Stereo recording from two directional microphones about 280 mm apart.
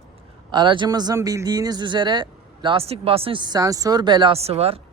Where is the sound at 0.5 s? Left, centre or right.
Centre.